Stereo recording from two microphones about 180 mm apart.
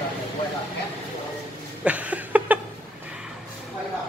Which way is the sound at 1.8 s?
10° right (ahead or behind).